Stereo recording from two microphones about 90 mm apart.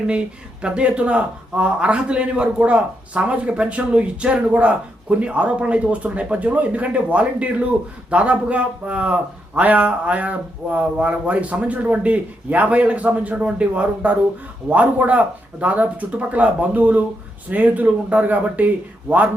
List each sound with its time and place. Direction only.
0.6 s a man's voice: 10° right (ahead or behind)